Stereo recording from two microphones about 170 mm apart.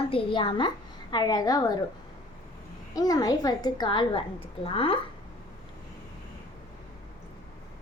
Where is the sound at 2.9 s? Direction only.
20° left (ahead or behind).